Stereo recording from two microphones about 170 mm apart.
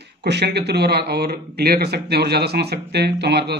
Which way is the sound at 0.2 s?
80° right.